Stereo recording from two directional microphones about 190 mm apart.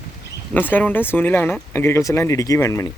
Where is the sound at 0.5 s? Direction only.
10° left (ahead or behind).